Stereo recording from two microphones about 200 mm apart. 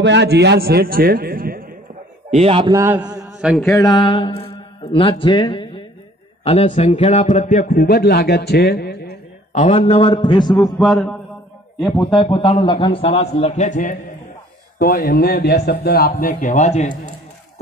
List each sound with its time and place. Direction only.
0.0 s a man's voice: 60° right (ahead or behind)
2.3 s a man's voice: 30° right (ahead or behind)
2.7 s a man's voice: 10° right (ahead or behind)
3.7 s a man's voice: 20° left (ahead or behind); by 7.8 s 35° left (ahead or behind)
7.8 s speech: 50° left (ahead or behind)
9.5 s a man's voice: 35° left (ahead or behind)
10.8 s a man's voice: 5° left (ahead or behind)
12.1 s a man's voice: 25° left (ahead or behind)